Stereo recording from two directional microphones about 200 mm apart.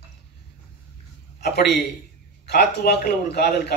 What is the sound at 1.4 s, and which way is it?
A man's voice, 55° left (ahead or behind).